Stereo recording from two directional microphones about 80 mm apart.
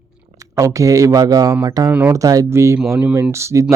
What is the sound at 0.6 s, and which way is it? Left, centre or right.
Speech, right.